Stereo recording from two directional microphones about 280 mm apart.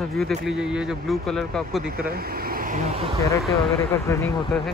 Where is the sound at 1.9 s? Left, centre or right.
Right.